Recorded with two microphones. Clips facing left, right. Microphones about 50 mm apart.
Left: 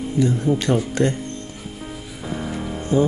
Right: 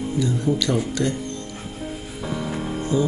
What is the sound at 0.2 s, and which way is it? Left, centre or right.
Speech, left.